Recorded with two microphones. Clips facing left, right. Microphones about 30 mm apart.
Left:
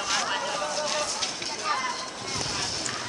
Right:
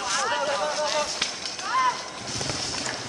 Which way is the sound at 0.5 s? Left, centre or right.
Centre.